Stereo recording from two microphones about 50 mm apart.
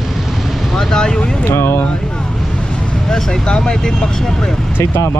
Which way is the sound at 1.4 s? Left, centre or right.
Left.